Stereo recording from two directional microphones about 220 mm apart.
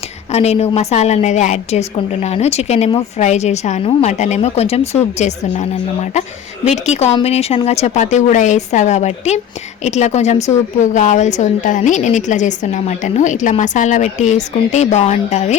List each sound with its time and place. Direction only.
0.3 s a woman's voice: 30° left (ahead or behind)
6.7 s a woman's voice: 30° left (ahead or behind)